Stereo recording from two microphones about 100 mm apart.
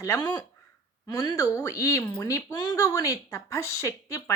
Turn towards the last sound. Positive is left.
turn(degrees=30)  # may be behind; listen again after turning